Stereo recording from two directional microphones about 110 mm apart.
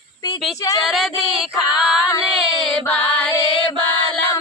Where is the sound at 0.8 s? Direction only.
Centre (ahead or behind).